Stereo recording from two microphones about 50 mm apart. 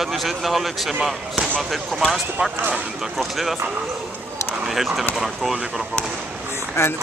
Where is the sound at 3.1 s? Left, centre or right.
Centre.